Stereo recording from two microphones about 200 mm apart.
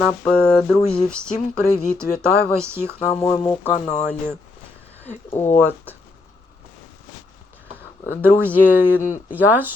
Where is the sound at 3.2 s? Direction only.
20° left (ahead or behind).